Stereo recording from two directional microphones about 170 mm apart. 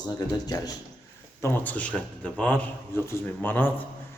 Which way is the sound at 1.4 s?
10° left (ahead or behind).